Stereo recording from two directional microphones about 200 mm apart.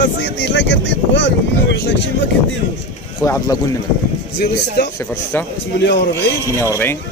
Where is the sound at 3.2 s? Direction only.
15° left (ahead or behind).